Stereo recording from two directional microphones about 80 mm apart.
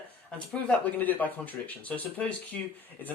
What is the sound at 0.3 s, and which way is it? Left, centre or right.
Speech, centre.